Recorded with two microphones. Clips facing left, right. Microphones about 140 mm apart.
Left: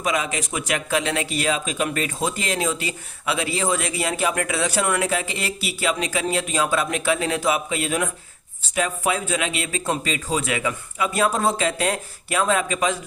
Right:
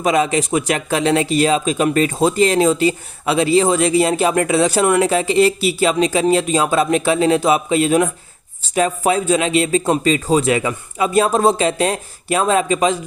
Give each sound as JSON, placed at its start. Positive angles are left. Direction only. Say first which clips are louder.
{"t": 0.0, "sound": "speech", "louder": "right 8 dB", "side_deg": -30}